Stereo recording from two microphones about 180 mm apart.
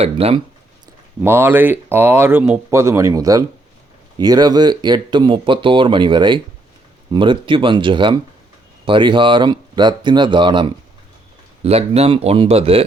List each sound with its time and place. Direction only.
0.0 s speech: 35° right (ahead or behind)
1.2 s speech: 15° right (ahead or behind); by 12.8 s 30° right (ahead or behind)